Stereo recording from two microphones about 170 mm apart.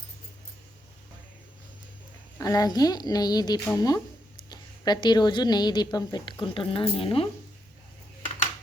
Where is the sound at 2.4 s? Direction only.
20° left (ahead or behind).